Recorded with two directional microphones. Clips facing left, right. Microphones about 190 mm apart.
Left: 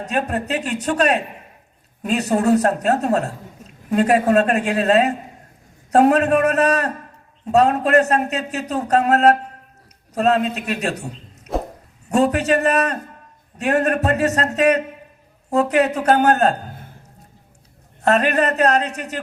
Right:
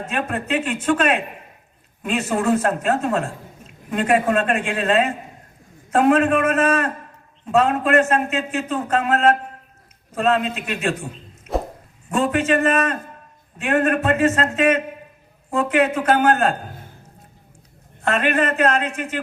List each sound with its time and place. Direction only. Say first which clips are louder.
0.0 s speech: left 3 dB; 40° left (ahead or behind)
11.5 s a sound: even; 40° left (ahead or behind)
12.1 s speech: left 2 dB; 40° left (ahead or behind)
18.0 s speech: left 3 dB; 40° left (ahead or behind)